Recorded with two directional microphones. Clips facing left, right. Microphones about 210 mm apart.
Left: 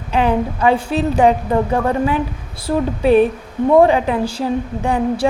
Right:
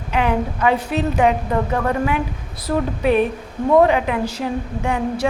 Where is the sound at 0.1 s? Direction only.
30° left (ahead or behind).